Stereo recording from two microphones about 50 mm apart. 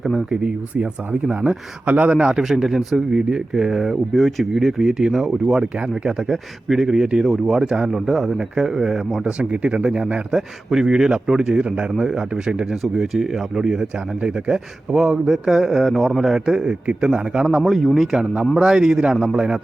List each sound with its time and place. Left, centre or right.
0.0 s speech: centre
1.3 s speech: centre
1.8 s speech: right
2.3 s speech: centre
4.1 s speech: centre
9.4 s speech: right
10.3 s speech: centre
12.7 s speech: centre
14.2 s a man's voice: right
16.8 s speech: right
17.7 s a man's voice: centre